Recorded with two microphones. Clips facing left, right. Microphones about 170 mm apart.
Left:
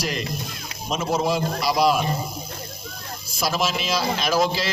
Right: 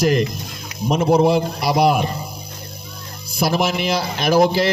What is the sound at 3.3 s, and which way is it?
A man's voice, 60° right (ahead or behind).